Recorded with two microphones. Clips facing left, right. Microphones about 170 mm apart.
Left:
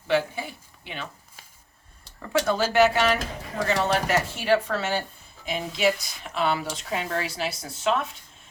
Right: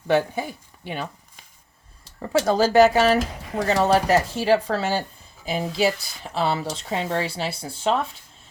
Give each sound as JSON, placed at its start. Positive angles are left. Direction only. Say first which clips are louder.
{"t": 0.1, "sound": "speech", "louder": "right 3 dB", "side_deg": -50}
{"t": 2.1, "sound": "speech", "louder": "right 4 dB", "side_deg": -35}